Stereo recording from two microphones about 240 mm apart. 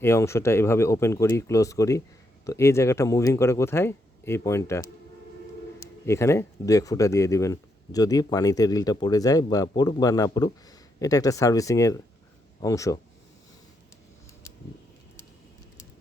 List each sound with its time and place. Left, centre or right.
0.0 s speech: centre
6.1 s speech: centre